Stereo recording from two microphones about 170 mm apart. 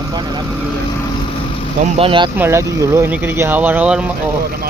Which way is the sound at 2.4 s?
15° right (ahead or behind).